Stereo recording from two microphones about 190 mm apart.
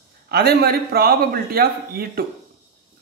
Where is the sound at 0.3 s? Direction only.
55° right (ahead or behind).